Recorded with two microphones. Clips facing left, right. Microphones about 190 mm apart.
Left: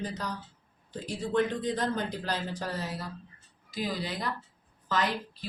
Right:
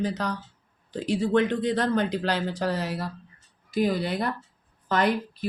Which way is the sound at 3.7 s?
60° right (ahead or behind).